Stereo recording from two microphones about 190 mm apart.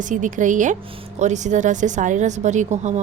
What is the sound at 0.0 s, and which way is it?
Speech, 40° right (ahead or behind).